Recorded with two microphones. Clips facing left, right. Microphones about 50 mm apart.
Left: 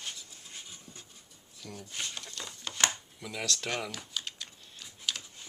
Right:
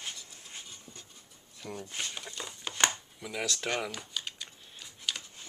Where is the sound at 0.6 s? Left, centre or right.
Centre.